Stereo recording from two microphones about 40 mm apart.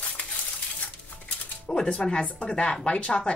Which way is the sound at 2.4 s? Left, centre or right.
Left.